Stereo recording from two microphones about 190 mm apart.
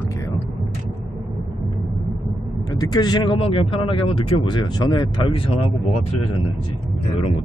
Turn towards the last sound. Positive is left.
turn(degrees=25)  # may be behind; listen again after turning